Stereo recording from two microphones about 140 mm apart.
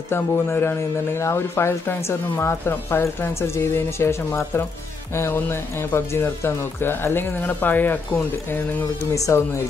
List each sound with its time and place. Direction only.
0.1 s speech: 15° left (ahead or behind)